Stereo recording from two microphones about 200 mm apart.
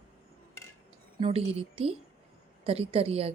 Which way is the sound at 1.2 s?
30° right (ahead or behind).